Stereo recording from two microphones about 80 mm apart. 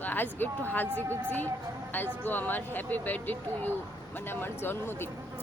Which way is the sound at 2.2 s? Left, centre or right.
Left.